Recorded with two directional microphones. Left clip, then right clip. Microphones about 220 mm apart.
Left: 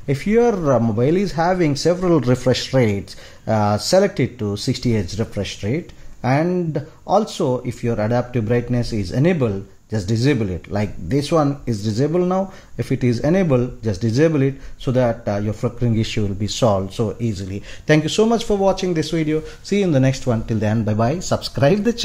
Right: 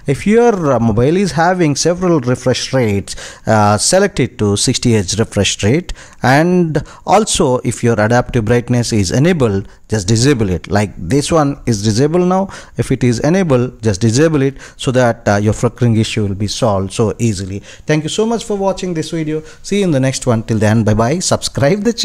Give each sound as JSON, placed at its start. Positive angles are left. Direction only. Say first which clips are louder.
{"t": 0.0, "sound": "speech", "louder": "right 6 dB", "side_deg": -25}
{"t": 17.8, "sound": "speech", "louder": "right 1 dB", "side_deg": -15}
{"t": 19.8, "sound": "speech", "louder": "right 4 dB", "side_deg": -25}